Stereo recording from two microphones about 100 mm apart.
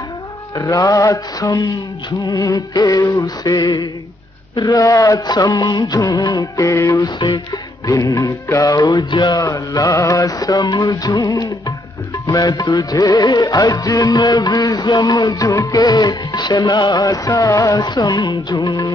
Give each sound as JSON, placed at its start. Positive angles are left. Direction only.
{"t": 0.6, "sound": "mantra", "side_deg": 35}
{"t": 3.4, "sound": "speech", "side_deg": 45}
{"t": 4.6, "sound": "mantra", "side_deg": 35}
{"t": 9.1, "sound": "mantra", "side_deg": 45}
{"t": 17.7, "sound": "speech", "side_deg": 45}
{"t": 18.6, "sound": "mantra", "side_deg": 40}